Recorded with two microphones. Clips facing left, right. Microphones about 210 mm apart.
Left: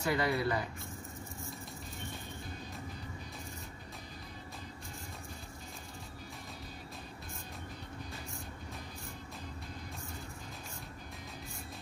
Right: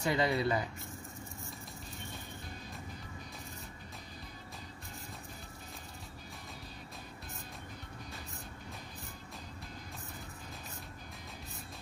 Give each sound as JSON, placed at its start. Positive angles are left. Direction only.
{"t": 0.0, "sound": "speech", "side_deg": -20}